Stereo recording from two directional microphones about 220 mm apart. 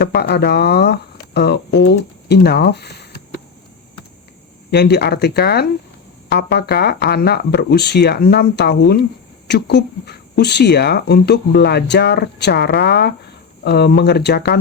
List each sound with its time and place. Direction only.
0.0 s speech: 45° left (ahead or behind)
4.7 s speech: 50° left (ahead or behind)